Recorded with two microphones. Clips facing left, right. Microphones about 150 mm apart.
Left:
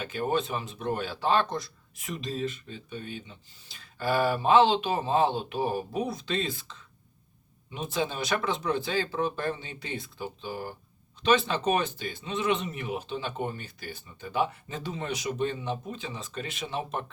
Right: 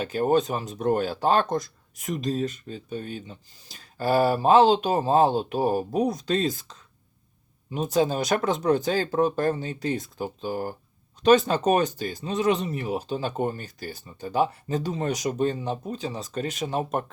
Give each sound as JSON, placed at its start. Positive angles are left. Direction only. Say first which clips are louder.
{"t": 0.0, "sound": "speech", "louder": "right 7 dB", "side_deg": -40}